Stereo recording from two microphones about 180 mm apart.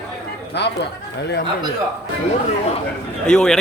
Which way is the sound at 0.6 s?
70° left (ahead or behind).